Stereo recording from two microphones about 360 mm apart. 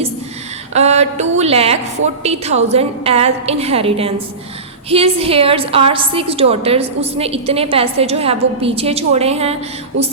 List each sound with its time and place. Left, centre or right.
0.7 s a woman's voice: centre